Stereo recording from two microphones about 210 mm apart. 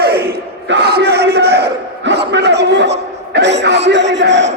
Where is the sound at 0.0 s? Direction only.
45° right (ahead or behind).